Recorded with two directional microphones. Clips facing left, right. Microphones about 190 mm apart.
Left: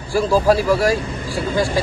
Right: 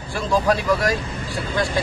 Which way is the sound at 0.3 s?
30° left (ahead or behind).